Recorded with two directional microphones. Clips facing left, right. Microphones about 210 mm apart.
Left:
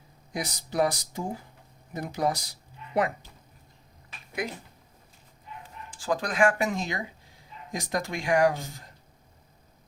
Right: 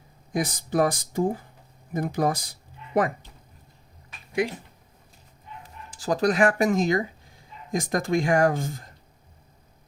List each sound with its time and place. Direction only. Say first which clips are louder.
0.3 s speech: right 4 dB; 50° right (ahead or behind)
5.6 s speech: right 2 dB; 40° right (ahead or behind)